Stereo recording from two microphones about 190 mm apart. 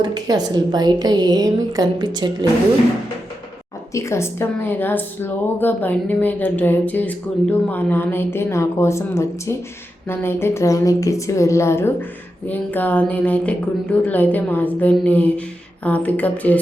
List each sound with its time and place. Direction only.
0.0 s a woman's voice: 20° right (ahead or behind)
3.9 s a woman's voice: 15° left (ahead or behind)